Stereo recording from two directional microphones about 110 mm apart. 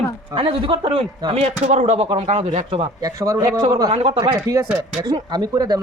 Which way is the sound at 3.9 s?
60° right (ahead or behind).